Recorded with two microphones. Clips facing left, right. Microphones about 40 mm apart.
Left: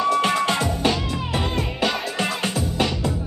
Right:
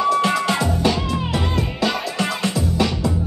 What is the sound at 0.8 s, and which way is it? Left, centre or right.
Music, left.